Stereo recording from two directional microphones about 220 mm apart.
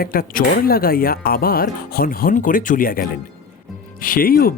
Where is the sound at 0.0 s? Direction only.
40° left (ahead or behind).